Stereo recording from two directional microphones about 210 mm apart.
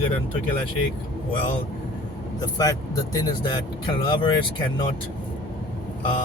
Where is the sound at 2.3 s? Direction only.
20° left (ahead or behind).